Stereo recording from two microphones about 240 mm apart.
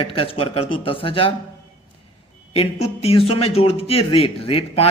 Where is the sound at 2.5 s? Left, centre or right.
Left.